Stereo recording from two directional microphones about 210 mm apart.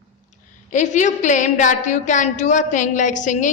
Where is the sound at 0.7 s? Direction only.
35° left (ahead or behind).